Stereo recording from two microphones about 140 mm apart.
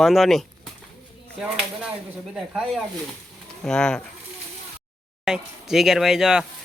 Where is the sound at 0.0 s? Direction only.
Centre (ahead or behind).